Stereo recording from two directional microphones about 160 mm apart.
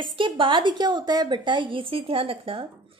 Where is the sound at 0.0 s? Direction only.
30° right (ahead or behind).